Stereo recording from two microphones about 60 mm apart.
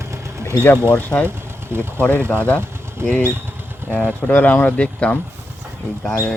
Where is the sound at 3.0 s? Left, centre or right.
Right.